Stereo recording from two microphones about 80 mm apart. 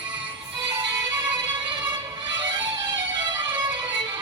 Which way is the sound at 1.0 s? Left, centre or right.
Right.